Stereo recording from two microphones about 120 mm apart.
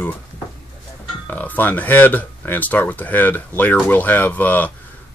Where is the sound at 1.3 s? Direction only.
15° left (ahead or behind).